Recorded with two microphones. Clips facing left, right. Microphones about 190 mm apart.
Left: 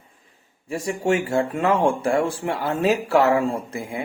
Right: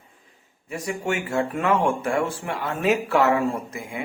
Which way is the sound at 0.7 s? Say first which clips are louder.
Left 5 dB; 30° left (ahead or behind).